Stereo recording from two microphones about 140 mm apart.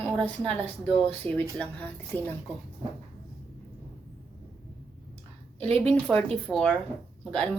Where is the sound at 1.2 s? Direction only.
40° right (ahead or behind).